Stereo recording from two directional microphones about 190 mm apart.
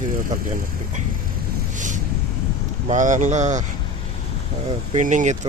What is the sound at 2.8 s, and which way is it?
Speech, 40° right (ahead or behind).